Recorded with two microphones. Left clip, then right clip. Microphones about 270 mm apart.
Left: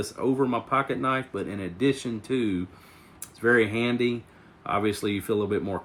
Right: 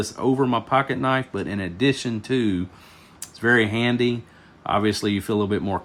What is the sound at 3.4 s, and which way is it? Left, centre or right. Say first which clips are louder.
Speech: right 3 dB; right.